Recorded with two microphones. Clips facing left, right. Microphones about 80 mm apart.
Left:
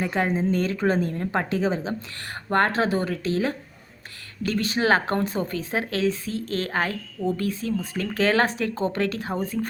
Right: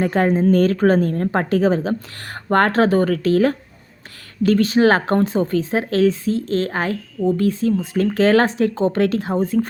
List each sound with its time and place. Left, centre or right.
0.0 s speech: right
4.4 s speech: right